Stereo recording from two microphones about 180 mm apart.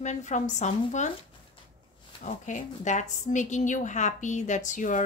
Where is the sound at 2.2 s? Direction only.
45° left (ahead or behind).